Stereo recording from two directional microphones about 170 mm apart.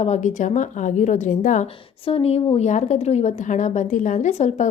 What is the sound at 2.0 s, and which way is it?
A woman's voice, 35° left (ahead or behind).